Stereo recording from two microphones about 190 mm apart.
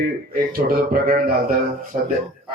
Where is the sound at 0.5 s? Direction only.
50° right (ahead or behind).